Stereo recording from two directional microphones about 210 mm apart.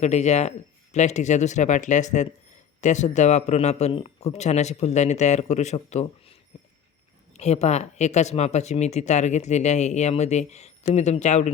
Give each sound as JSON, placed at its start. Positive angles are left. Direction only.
{"t": 0.0, "sound": "speech", "side_deg": 35}
{"t": 7.3, "sound": "speech", "side_deg": 30}